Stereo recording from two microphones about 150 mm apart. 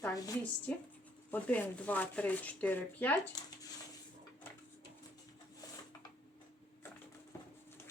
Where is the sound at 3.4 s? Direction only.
25° left (ahead or behind).